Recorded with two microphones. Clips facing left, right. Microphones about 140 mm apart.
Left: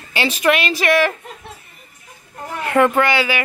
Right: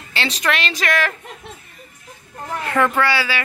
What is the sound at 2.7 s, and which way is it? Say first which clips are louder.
Speech: left 3 dB; 20° left (ahead or behind).